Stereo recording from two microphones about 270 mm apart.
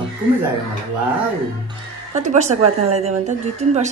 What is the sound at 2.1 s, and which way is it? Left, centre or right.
A woman's voice, right.